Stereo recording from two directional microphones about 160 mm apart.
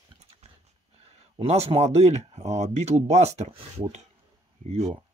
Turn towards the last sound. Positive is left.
turn(degrees=-40)  # may be behind; listen again after turning